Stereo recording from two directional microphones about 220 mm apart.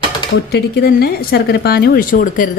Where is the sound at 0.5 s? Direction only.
45° left (ahead or behind).